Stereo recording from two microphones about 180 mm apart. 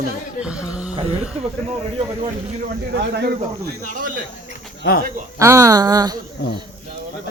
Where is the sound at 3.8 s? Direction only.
45° right (ahead or behind).